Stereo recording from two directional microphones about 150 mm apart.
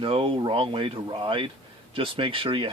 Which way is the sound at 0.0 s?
35° right (ahead or behind).